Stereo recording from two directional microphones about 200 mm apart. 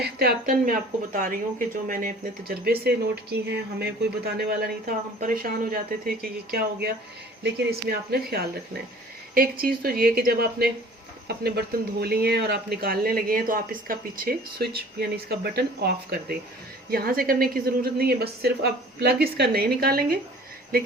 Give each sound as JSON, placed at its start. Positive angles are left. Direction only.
{"t": 0.0, "sound": "speech", "side_deg": -50}
{"t": 2.6, "sound": "speech", "side_deg": -55}